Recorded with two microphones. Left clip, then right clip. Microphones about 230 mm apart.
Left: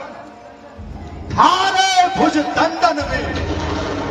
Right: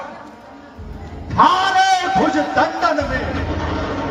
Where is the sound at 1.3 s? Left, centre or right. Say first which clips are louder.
Even; left.